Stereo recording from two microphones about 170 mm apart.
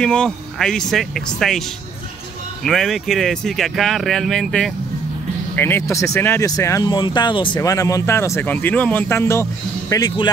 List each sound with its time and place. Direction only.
0.0 s speech: 5° left (ahead or behind)
2.6 s speech: centre (ahead or behind)
5.6 s speech: 15° left (ahead or behind)